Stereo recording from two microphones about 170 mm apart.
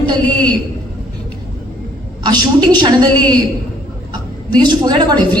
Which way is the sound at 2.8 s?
25° right (ahead or behind).